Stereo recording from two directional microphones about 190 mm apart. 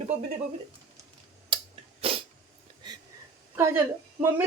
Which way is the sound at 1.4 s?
30° right (ahead or behind).